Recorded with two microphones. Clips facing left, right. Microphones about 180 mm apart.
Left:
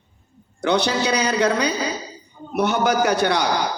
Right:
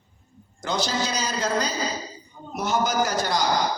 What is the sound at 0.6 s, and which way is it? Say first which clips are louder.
A woman's voice: left 6 dB; 65° left (ahead or behind).